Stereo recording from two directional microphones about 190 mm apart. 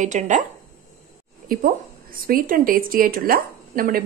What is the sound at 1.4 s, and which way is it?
A woman's voice, 50° right (ahead or behind).